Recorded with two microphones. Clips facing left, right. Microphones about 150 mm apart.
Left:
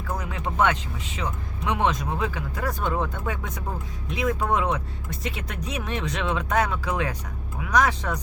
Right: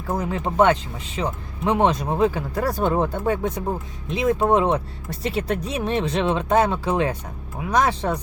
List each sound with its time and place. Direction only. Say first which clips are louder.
0.1 s speech: right 7 dB; 35° right (ahead or behind)